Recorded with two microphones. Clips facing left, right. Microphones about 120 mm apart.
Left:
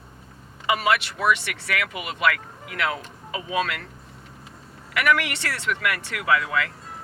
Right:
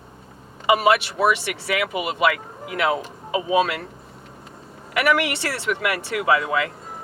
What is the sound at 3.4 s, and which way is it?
Speech, 25° right (ahead or behind).